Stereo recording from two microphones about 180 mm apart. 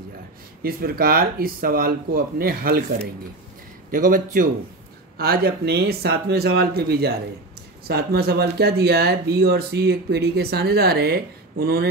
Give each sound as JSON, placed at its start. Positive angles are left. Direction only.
{"t": 0.6, "sound": "speech", "side_deg": -55}
{"t": 3.9, "sound": "speech", "side_deg": -50}